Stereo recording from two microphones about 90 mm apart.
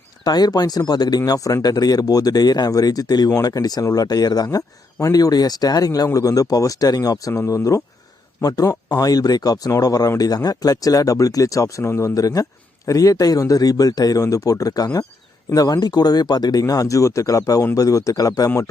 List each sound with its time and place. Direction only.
0.3 s speech: 50° left (ahead or behind)